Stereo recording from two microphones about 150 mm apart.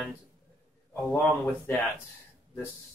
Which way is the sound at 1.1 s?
15° left (ahead or behind).